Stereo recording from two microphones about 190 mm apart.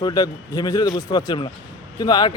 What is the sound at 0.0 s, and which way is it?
A man's voice, 20° left (ahead or behind).